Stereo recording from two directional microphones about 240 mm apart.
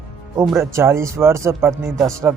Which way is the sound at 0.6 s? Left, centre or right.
Centre.